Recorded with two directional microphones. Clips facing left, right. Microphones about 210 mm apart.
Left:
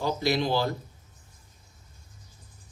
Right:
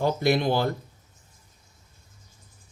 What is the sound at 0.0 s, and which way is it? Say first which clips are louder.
Speech: right 4 dB; 55° right (ahead or behind).